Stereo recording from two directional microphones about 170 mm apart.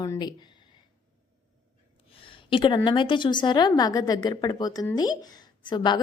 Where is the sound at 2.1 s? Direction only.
30° left (ahead or behind).